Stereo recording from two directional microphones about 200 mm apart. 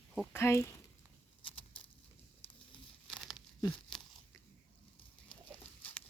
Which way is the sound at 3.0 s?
Centre (ahead or behind).